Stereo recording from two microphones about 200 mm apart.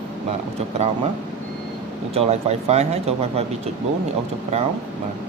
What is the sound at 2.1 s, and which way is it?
Speech, 30° right (ahead or behind).